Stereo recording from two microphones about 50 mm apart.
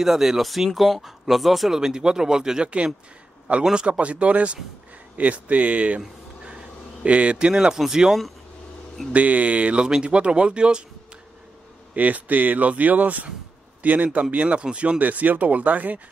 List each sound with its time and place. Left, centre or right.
0.0 s speech: centre
1.8 s speech: centre
3.7 s speech: right; by 8.2 s centre
9.1 s speech: right
11.9 s speech: right
15.0 s speech: right